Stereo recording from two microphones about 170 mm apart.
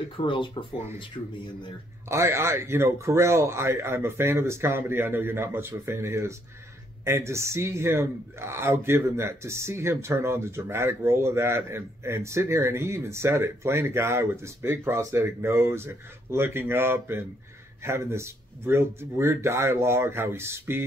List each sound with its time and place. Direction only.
0.2 s speech: 30° left (ahead or behind)
2.0 s a man's voice: 15° right (ahead or behind)